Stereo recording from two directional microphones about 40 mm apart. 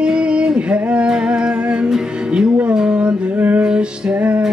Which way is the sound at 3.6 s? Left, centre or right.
Centre.